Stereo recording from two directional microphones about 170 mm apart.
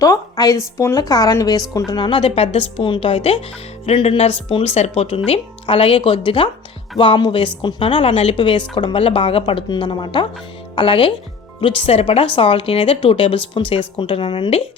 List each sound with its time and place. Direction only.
0.0 s a woman's voice: 20° left (ahead or behind)